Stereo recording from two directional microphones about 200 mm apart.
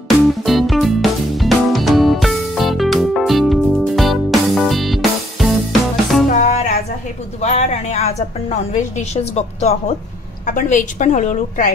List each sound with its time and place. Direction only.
0.1 s music: centre (ahead or behind)
6.2 s music: 40° left (ahead or behind)
7.4 s a woman's voice: 35° left (ahead or behind)